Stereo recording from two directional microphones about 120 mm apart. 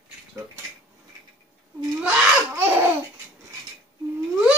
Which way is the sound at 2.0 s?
10° right (ahead or behind).